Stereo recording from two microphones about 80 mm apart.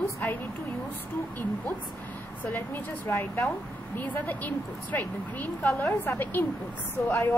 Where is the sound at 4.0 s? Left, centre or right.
Left.